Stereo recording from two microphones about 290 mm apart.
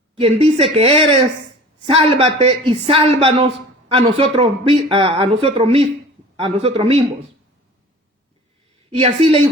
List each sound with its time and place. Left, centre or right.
0.2 s a man's voice: centre
2.0 s a man's voice: centre
8.9 s a man's voice: centre